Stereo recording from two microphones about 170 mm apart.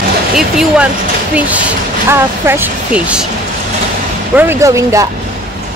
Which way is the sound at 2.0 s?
15° right (ahead or behind).